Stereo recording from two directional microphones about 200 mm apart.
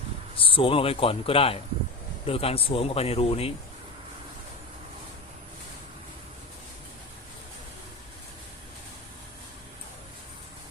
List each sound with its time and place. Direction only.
0.3 s speech: 25° left (ahead or behind)